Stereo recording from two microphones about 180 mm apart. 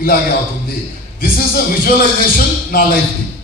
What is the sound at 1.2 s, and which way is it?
A man's voice, 55° left (ahead or behind).